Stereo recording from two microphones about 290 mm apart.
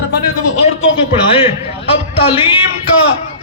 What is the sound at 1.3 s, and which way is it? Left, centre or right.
A man's voice, centre.